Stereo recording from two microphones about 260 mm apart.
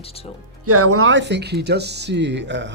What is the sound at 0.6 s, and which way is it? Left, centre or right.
Speech, right.